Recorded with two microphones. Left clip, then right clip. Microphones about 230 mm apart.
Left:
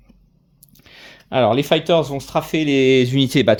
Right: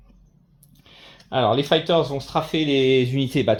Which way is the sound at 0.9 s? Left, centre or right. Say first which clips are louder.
Left 3 dB; left.